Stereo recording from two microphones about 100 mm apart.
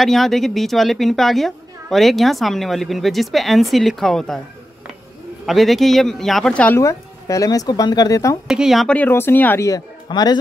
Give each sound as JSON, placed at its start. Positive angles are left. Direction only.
{"t": 0.0, "sound": "a woman's voice", "side_deg": 0}
{"t": 5.5, "sound": "a woman's voice", "side_deg": 0}
{"t": 6.8, "sound": "speech", "side_deg": 35}
{"t": 8.5, "sound": "a woman's voice", "side_deg": -5}
{"t": 8.8, "sound": "speech", "side_deg": 15}
{"t": 9.7, "sound": "speech", "side_deg": 40}